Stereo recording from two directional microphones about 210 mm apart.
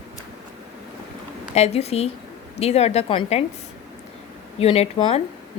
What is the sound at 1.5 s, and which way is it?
A woman's voice, 30° left (ahead or behind).